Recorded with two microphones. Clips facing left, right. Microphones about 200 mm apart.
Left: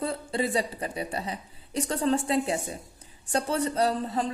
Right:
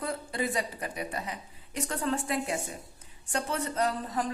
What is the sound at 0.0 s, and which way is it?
Speech, 30° left (ahead or behind).